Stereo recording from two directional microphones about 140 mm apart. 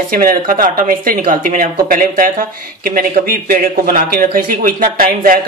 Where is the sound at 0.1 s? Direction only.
90° right; by 1.7 s 75° right (ahead or behind).